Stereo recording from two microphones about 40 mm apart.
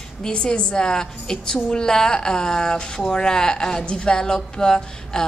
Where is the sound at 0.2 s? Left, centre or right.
Left.